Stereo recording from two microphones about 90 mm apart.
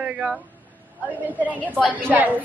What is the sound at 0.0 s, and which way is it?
Speech, 10° right (ahead or behind).